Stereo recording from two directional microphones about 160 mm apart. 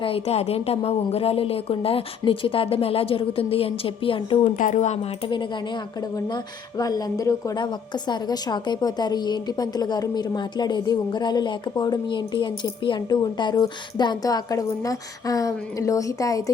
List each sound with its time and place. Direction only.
0.0 s a woman's voice: 40° left (ahead or behind)
4.5 s a woman's voice: 50° left (ahead or behind)
5.2 s a woman's voice: 30° left (ahead or behind)